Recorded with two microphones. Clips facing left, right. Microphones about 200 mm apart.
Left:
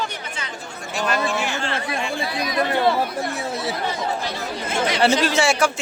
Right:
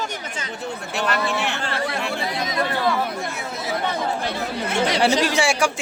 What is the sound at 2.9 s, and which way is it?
Speech, 35° left (ahead or behind).